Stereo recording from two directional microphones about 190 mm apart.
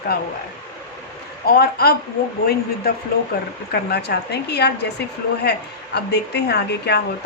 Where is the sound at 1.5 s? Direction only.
55° left (ahead or behind).